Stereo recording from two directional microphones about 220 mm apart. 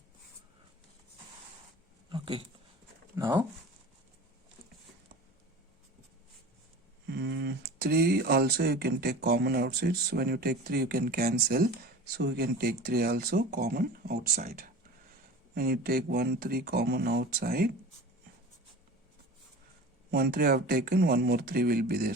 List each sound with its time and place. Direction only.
2.0 s a sound: 20° right (ahead or behind)
3.2 s speech: 20° right (ahead or behind)
7.1 s speech: 50° right (ahead or behind)
20.1 s speech: 45° right (ahead or behind)